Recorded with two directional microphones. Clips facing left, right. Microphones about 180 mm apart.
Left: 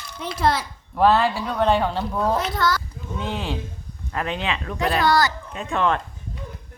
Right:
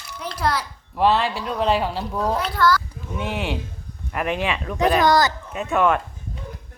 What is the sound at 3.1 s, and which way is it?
A woman's voice, 15° right (ahead or behind).